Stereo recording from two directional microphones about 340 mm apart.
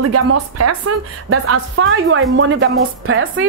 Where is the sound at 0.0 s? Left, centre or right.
Right.